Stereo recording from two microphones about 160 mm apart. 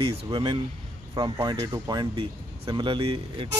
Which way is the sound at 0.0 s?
35° right (ahead or behind).